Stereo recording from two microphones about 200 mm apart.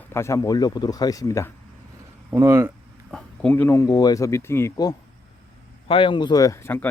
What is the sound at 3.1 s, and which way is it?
Speech, 5° left (ahead or behind).